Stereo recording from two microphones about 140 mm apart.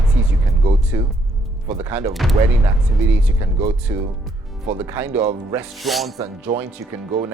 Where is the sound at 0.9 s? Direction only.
20° right (ahead or behind).